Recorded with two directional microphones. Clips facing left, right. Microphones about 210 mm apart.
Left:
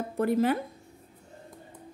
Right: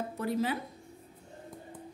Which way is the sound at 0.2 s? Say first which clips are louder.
Left 7 dB; 55° left (ahead or behind).